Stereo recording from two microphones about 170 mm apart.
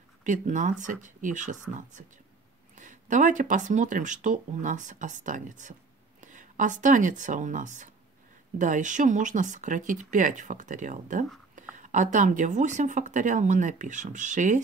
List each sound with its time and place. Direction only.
0.2 s speech: 45° right (ahead or behind)